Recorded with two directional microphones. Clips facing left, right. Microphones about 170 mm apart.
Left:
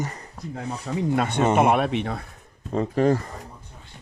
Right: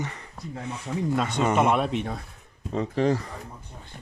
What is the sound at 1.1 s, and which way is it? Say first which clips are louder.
Speech: left 3 dB; 60° left (ahead or behind).